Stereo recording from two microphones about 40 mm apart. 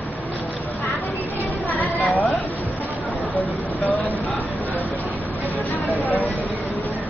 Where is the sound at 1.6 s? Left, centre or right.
Left.